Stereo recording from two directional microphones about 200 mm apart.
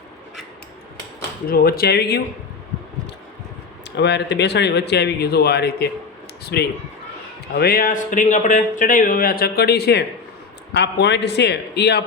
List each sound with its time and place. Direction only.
1.5 s speech: 50° left (ahead or behind)
3.9 s speech: 60° left (ahead or behind)
6.4 s a sound: 55° left (ahead or behind)
7.4 s speech: 50° left (ahead or behind)